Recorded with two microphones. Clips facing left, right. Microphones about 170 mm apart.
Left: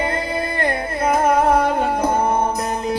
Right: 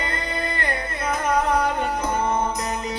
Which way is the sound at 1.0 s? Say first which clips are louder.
Left 7 dB; 50° left (ahead or behind).